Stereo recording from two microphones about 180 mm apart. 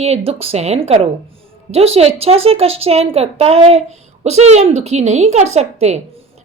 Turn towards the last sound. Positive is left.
turn(degrees=-40)  # may be behind; listen again after turning